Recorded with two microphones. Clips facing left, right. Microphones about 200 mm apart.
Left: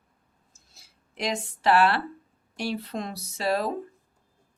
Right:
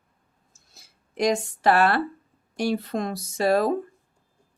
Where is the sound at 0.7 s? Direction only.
45° right (ahead or behind).